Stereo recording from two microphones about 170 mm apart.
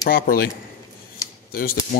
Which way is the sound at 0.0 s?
60° left (ahead or behind).